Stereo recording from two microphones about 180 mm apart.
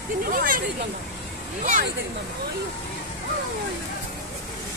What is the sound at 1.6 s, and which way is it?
Speech, 45° right (ahead or behind).